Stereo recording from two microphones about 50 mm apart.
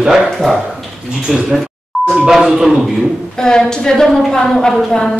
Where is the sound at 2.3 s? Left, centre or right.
Centre.